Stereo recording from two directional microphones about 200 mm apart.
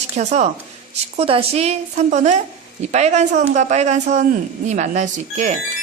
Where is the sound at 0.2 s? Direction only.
35° right (ahead or behind).